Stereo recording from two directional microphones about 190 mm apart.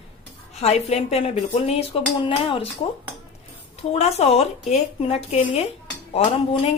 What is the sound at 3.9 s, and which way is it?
Speech, 35° left (ahead or behind).